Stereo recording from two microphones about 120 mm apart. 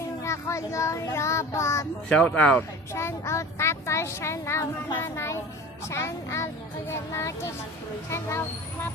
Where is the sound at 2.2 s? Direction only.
10° left (ahead or behind).